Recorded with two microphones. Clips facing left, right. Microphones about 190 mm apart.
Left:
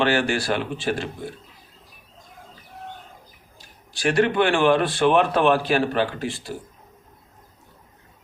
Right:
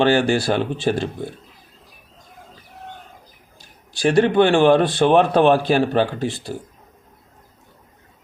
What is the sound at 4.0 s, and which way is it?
Speech, 25° right (ahead or behind).